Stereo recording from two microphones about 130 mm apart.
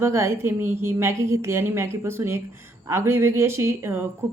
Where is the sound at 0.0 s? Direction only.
20° right (ahead or behind).